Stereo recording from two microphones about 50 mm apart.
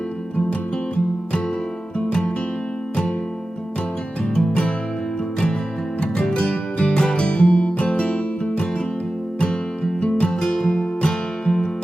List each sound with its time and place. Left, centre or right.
2.0 s music: left
4.4 s music: centre
6.0 s music: centre
10.0 s music: left